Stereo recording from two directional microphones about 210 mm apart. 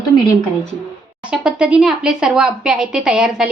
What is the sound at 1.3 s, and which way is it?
A woman's voice, 5° right (ahead or behind).